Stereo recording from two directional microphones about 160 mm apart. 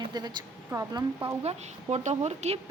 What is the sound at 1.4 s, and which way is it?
A woman's voice, 45° right (ahead or behind).